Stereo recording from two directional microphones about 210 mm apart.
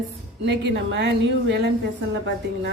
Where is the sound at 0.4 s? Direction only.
55° right (ahead or behind).